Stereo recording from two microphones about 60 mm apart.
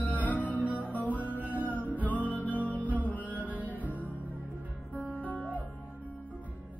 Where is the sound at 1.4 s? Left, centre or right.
Right.